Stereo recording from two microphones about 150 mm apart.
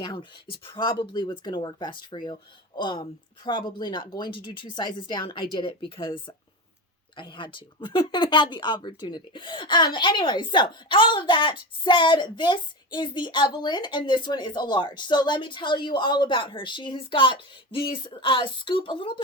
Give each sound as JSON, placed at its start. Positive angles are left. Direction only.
{"t": 0.0, "sound": "speech", "side_deg": 30}